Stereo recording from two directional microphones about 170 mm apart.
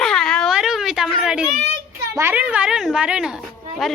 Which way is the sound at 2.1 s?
10° right (ahead or behind).